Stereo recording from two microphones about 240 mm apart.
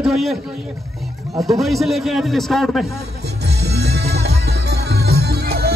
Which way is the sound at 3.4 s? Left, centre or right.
Right.